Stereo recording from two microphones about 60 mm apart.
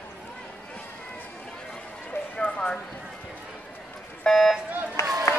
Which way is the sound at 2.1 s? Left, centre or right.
Left.